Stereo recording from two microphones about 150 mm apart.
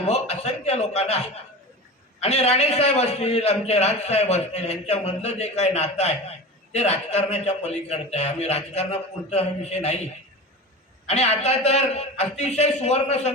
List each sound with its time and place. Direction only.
0.0 s a man's voice: 45° left (ahead or behind)
11.1 s a man's voice: 45° left (ahead or behind)